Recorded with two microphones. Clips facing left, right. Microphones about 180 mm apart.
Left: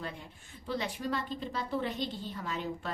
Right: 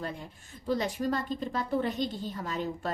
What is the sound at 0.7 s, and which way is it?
A woman's voice, 45° right (ahead or behind).